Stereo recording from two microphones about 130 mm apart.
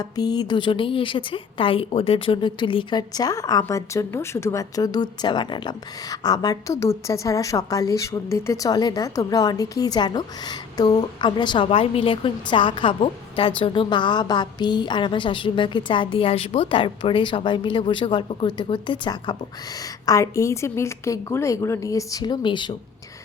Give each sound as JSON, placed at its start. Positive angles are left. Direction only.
{"t": 0.0, "sound": "a woman's voice", "side_deg": 30}
{"t": 20.1, "sound": "speech", "side_deg": 25}